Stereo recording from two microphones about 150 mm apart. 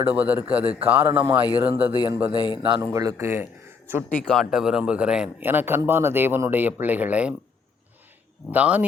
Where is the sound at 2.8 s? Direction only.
20° right (ahead or behind).